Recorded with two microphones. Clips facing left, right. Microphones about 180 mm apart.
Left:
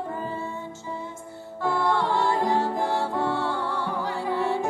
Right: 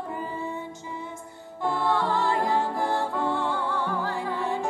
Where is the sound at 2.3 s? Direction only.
20° left (ahead or behind).